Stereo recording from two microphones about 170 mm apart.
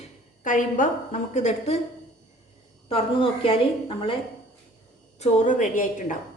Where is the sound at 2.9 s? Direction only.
35° left (ahead or behind).